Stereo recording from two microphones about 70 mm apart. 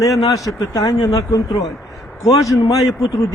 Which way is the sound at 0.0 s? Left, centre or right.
Left.